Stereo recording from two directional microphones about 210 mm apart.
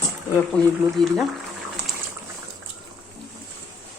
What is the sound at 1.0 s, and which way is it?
Speech, 20° right (ahead or behind).